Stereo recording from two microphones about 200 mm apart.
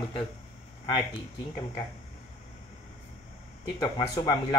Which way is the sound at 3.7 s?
20° left (ahead or behind).